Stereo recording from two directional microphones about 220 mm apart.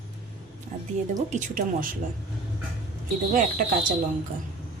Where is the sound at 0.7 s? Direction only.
35° right (ahead or behind).